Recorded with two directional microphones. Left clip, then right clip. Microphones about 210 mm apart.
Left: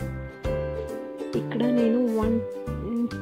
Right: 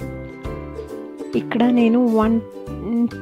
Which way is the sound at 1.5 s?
25° right (ahead or behind).